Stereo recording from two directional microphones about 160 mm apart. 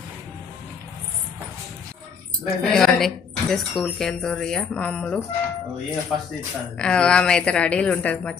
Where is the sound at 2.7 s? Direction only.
Centre (ahead or behind).